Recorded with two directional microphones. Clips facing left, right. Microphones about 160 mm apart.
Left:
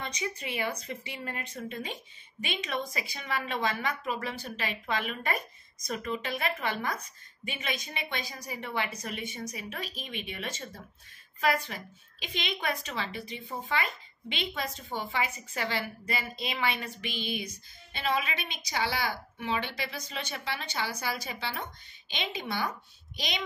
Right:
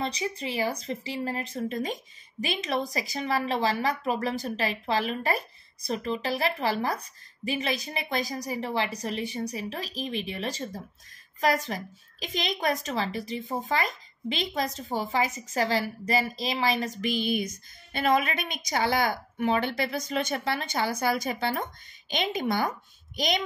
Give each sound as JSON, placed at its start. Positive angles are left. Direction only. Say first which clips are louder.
{"t": 0.0, "sound": "a woman's voice", "louder": "right 5 dB", "side_deg": -30}